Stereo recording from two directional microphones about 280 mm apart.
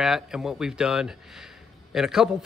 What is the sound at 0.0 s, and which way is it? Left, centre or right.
Speech, centre.